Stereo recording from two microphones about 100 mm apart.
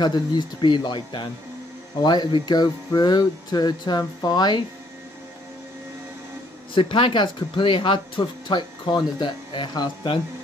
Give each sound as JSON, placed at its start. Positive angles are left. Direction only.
{"t": 0.0, "sound": "speech", "side_deg": 45}
{"t": 6.7, "sound": "speech", "side_deg": 60}